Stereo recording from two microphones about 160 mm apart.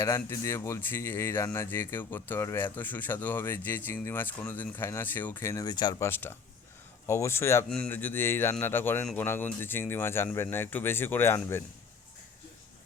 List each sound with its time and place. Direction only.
0.0 s speech: 15° left (ahead or behind)